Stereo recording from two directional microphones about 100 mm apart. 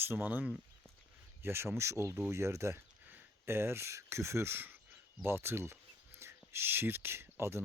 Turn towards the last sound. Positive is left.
turn(degrees=-25)  # may be behind; listen again after turning